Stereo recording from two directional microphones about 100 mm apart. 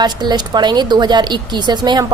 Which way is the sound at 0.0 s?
45° right (ahead or behind).